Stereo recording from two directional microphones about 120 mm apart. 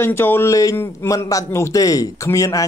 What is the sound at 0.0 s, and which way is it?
A man's voice, 20° left (ahead or behind).